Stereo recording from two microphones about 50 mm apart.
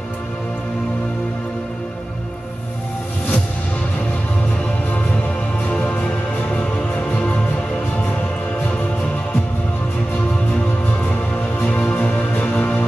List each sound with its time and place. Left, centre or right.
11.6 s music: left